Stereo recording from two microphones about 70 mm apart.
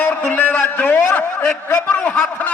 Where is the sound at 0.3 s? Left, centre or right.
Left.